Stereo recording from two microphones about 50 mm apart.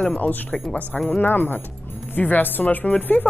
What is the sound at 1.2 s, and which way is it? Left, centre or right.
A woman's voice, left.